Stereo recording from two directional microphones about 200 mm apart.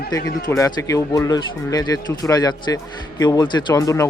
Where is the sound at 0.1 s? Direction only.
15° left (ahead or behind).